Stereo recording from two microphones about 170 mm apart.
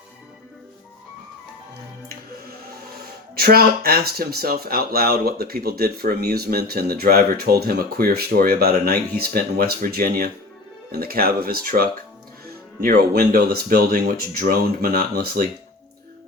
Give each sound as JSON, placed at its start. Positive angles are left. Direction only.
{"t": 3.3, "sound": "speech", "side_deg": -65}